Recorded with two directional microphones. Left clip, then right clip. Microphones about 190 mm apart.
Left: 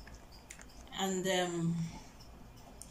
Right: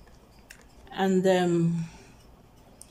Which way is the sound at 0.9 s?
50° right (ahead or behind).